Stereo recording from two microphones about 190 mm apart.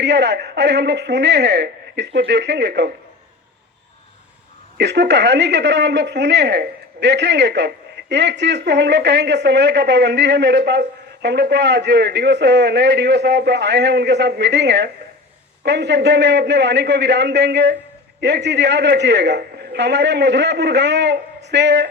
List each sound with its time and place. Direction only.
0.0 s speech: 65° right (ahead or behind)
4.8 s speech: 65° right (ahead or behind)